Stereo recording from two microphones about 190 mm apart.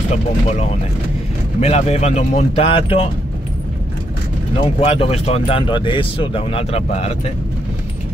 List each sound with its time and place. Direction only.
0.1 s speech: 35° left (ahead or behind)
4.7 s speech: 30° left (ahead or behind)